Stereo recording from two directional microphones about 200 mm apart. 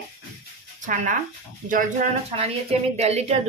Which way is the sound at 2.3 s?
30° right (ahead or behind).